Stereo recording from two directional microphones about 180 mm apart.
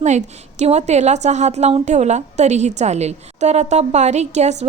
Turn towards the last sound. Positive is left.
turn(degrees=-40)  # may be behind; listen again after turning